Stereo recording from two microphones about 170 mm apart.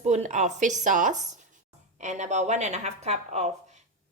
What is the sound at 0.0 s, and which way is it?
A woman's voice, 45° right (ahead or behind).